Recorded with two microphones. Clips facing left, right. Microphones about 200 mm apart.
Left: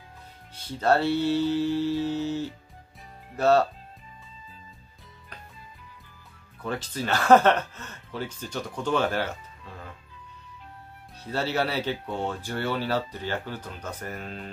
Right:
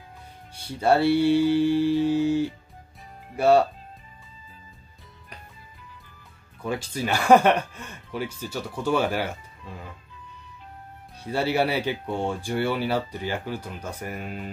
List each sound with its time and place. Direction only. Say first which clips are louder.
0.7 s mantra: right 3 dB; 10° right (ahead or behind)
3.3 s speech: right 2 dB; 10° right (ahead or behind)
6.6 s speech: right 2 dB; 10° right (ahead or behind)
11.2 s speech: right 4 dB; 10° right (ahead or behind)